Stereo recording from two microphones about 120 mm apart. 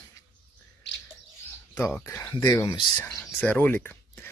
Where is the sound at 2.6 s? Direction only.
45° left (ahead or behind).